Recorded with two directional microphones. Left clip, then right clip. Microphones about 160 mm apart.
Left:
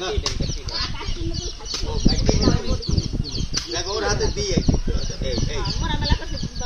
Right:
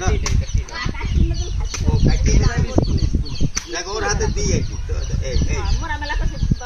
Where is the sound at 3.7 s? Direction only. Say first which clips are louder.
Right 1 dB; 5° left (ahead or behind).